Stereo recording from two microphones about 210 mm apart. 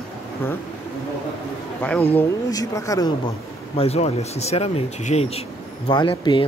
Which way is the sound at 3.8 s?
30° left (ahead or behind).